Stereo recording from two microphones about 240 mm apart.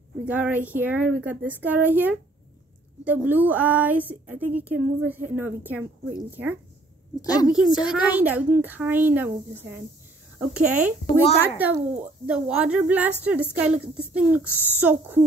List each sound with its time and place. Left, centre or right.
0.2 s a woman's voice: centre
7.2 s a woman's voice: centre
7.4 s a woman's voice: centre
14.4 s a woman's voice: centre
14.8 s a woman's voice: centre